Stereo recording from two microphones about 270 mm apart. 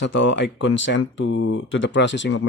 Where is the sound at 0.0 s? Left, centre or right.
Left.